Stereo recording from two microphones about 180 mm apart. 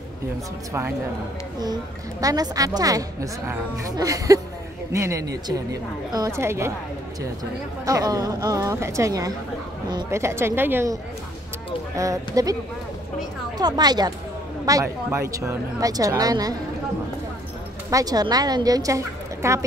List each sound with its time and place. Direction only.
1.6 s a woman's voice: 20° right (ahead or behind)
7.8 s a woman's voice: 20° right (ahead or behind)
12.0 s a woman's voice: 20° right (ahead or behind)
13.6 s a woman's voice: 20° right (ahead or behind)
17.8 s a woman's voice: 20° right (ahead or behind)